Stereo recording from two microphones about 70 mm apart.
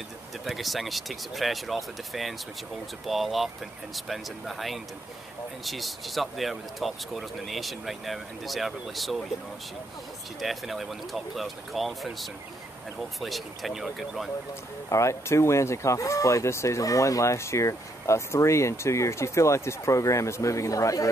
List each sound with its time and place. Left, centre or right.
0.5 s speech: centre
10.4 s speech: centre
14.9 s speech: left